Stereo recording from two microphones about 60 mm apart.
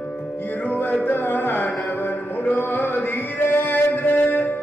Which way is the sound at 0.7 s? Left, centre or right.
Left.